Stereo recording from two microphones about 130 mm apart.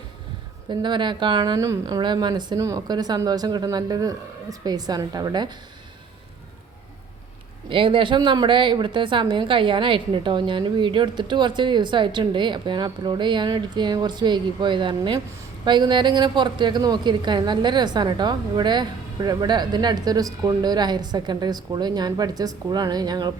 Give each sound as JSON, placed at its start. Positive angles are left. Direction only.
{"t": 0.7, "sound": "a woman's voice", "side_deg": -35}
{"t": 1.5, "sound": "a woman's voice", "side_deg": -25}
{"t": 7.7, "sound": "a woman's voice", "side_deg": -40}